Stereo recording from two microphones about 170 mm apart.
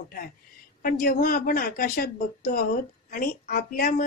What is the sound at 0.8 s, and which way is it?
A woman's voice, 55° left (ahead or behind).